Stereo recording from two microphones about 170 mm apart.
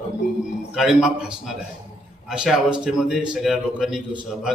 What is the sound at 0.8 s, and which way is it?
A man's voice, 5° right (ahead or behind).